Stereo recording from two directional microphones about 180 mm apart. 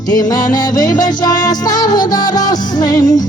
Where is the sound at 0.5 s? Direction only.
20° left (ahead or behind).